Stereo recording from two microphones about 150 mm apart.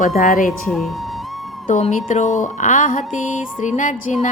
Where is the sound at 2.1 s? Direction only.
55° left (ahead or behind).